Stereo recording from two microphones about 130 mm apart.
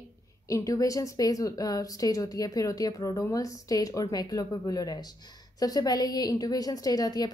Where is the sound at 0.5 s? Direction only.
25° left (ahead or behind).